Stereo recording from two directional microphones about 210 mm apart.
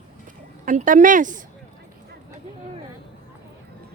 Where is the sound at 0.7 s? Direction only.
40° right (ahead or behind).